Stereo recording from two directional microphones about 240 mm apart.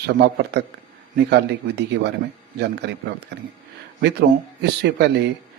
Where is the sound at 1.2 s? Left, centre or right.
Right.